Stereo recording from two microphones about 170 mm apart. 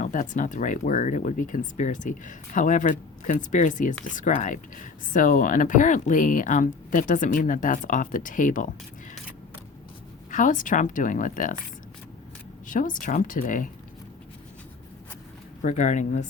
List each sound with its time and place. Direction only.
0.0 s speech: 50° left (ahead or behind)
10.3 s speech: 50° left (ahead or behind)
12.6 s speech: 50° left (ahead or behind)
15.6 s speech: 45° left (ahead or behind)